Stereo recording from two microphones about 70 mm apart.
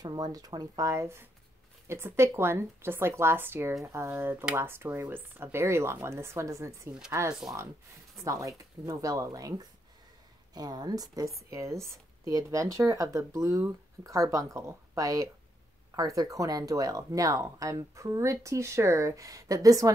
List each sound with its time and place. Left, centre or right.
0.0 s speech: right
0.8 s speech: right
8.5 s speech: right
11.5 s speech: right